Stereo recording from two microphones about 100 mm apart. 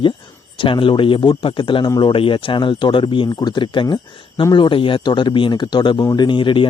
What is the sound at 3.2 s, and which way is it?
Speech, 45° left (ahead or behind).